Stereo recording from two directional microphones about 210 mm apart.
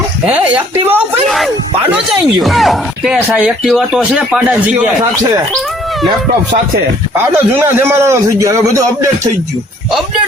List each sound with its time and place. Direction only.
0.3 s a man's voice: 5° right (ahead or behind)
7.3 s a man's voice: 10° right (ahead or behind)